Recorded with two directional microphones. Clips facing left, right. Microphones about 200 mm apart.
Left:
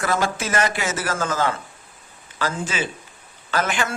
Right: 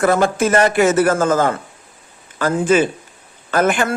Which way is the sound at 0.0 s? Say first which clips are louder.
Right 8 dB; 55° right (ahead or behind).